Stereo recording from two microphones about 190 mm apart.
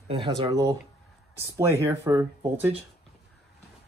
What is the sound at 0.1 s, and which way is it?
Speech, 25° right (ahead or behind).